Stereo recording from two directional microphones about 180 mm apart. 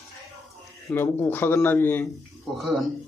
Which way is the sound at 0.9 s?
10° left (ahead or behind).